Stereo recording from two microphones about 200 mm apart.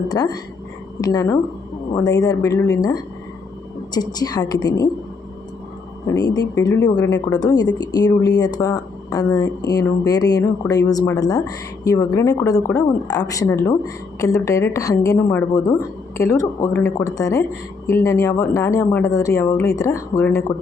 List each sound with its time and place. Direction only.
0.1 s a woman's voice: 20° left (ahead or behind)
6.1 s a woman's voice: 20° left (ahead or behind)